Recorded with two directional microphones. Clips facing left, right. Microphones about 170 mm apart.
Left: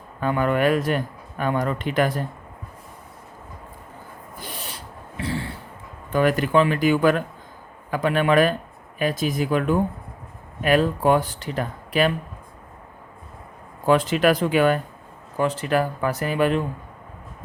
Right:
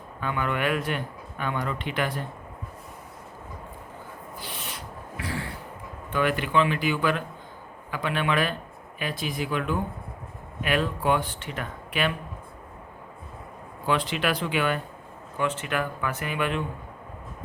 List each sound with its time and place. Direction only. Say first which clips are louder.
0.2 s speech: left 7 dB; 40° left (ahead or behind)
4.4 s a sound: left 3 dB; 40° left (ahead or behind)
6.1 s speech: left 6 dB; 40° left (ahead or behind)
13.8 s speech: left 8 dB; 45° left (ahead or behind)